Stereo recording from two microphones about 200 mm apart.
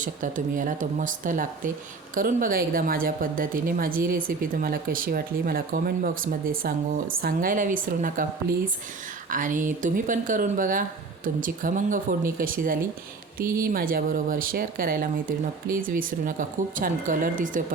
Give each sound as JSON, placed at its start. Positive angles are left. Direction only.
{"t": 0.0, "sound": "speech", "side_deg": -40}